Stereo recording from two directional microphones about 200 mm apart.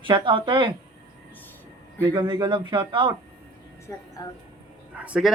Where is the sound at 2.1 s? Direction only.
20° right (ahead or behind).